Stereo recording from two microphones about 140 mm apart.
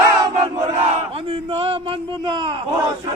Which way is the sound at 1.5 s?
40° right (ahead or behind).